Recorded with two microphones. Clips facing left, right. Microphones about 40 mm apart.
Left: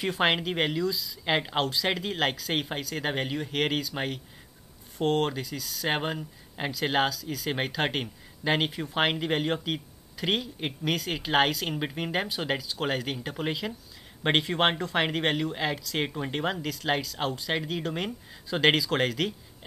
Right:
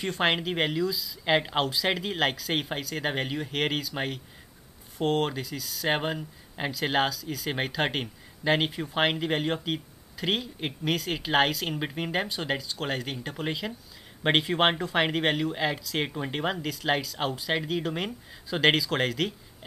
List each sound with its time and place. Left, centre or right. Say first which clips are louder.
0.0 s speech: left 1 dB; centre